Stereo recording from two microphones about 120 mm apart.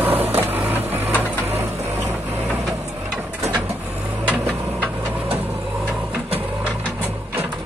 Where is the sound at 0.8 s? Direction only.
15° right (ahead or behind).